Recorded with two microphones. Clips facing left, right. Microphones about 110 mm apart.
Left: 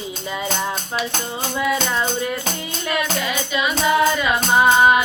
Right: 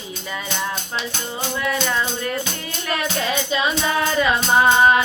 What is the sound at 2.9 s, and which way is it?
Music, 30° right (ahead or behind).